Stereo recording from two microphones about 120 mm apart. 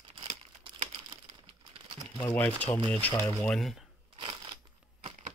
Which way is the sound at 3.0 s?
15° left (ahead or behind).